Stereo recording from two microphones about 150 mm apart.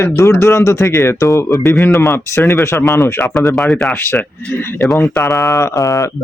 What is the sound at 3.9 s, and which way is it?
Speech, 15° left (ahead or behind).